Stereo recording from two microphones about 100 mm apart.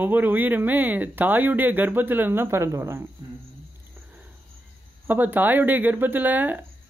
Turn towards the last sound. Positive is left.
turn(degrees=-20)  # may be behind; listen again after turning